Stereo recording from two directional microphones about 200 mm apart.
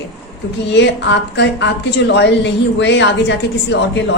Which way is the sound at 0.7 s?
60° left (ahead or behind).